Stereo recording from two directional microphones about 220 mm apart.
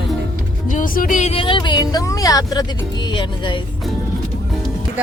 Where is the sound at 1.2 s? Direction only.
30° left (ahead or behind).